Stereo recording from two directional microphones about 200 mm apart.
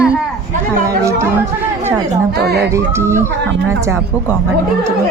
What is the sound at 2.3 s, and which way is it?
Speech, 55° right (ahead or behind).